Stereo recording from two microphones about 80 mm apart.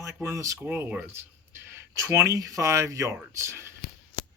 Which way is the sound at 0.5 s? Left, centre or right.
Right.